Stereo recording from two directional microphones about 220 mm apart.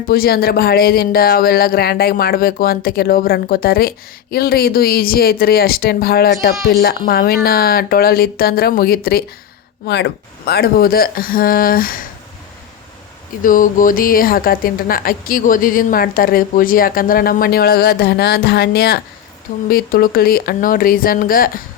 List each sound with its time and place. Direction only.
0.1 s speech: 45° left (ahead or behind)
13.4 s speech: 35° left (ahead or behind)